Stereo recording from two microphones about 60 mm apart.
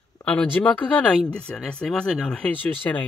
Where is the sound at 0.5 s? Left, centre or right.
Left.